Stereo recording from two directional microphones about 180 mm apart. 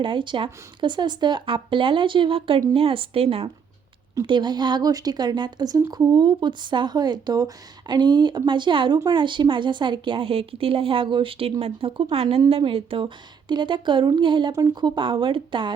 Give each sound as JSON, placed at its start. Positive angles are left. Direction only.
{"t": 0.0, "sound": "a woman's voice", "side_deg": -25}